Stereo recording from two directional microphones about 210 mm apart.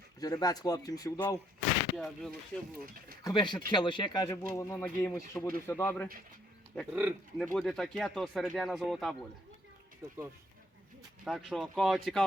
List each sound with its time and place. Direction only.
0.2 s speech: 15° left (ahead or behind)
2.0 s speech: centre (ahead or behind)
3.2 s speech: 20° left (ahead or behind)
6.7 s speech: 5° right (ahead or behind)
11.3 s speech: centre (ahead or behind)